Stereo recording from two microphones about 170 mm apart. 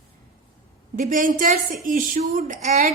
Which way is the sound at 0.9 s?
50° right (ahead or behind).